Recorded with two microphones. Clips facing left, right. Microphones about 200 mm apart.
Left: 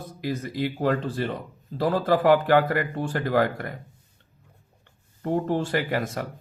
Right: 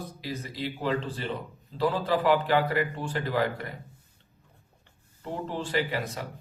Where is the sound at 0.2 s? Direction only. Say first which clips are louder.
Left 8 dB; 50° left (ahead or behind).